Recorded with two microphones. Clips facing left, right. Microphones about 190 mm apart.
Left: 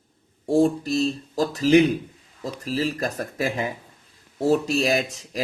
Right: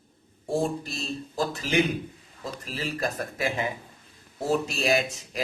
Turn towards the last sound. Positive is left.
turn(degrees=35)  # may be behind; listen again after turning